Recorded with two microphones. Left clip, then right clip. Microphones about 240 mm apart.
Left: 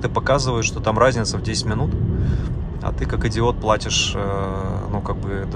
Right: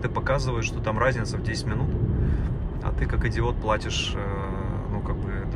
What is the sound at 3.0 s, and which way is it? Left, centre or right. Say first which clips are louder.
Speech: left 7 dB; centre.